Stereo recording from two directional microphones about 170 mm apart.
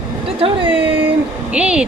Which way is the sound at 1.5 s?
5° right (ahead or behind).